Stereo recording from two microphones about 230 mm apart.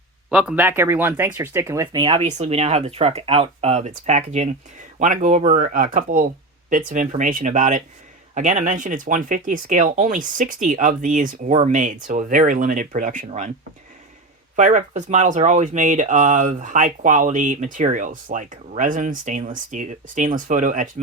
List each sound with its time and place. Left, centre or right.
0.3 s speech: centre; by 13.5 s right
14.5 s speech: right